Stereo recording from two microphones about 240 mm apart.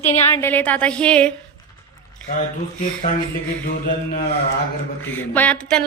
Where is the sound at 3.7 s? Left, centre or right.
Left.